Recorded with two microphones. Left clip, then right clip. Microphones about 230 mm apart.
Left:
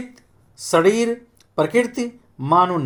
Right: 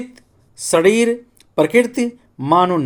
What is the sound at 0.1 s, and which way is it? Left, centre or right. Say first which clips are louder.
Speech: right 3 dB; right.